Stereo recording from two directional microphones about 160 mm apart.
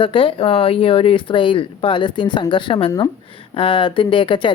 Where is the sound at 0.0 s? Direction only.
35° left (ahead or behind).